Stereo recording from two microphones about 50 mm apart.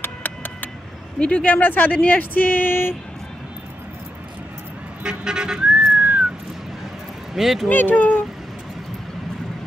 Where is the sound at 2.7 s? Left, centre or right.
Left.